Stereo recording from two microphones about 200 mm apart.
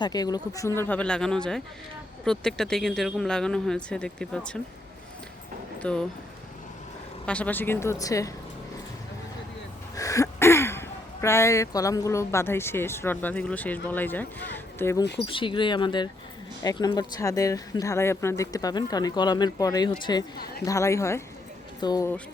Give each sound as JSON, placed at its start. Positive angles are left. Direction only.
{"t": 0.0, "sound": "speech", "side_deg": 20}
{"t": 5.8, "sound": "speech", "side_deg": 5}
{"t": 7.3, "sound": "speech", "side_deg": 5}
{"t": 9.9, "sound": "speech", "side_deg": 15}
{"t": 15.3, "sound": "speech", "side_deg": 25}